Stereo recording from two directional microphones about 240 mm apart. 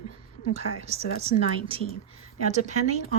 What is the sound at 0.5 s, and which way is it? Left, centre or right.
Speech, right.